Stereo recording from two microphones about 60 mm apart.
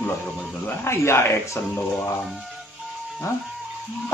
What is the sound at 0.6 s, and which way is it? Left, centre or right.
Speech, left.